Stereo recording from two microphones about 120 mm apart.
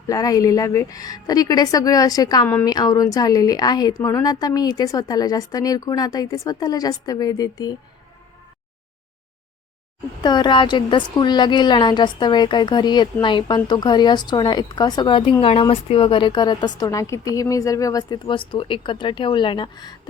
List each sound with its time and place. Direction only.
0.1 s a woman's voice: 30° left (ahead or behind)
10.2 s a woman's voice: 35° left (ahead or behind)
18.3 s speech: 45° left (ahead or behind)